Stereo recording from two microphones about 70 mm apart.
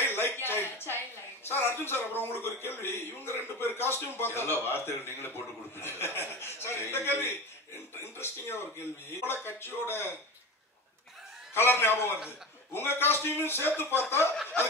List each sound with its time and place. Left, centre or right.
0.0 s a sound: left
1.8 s a man's voice: left
11.5 s a man's voice: left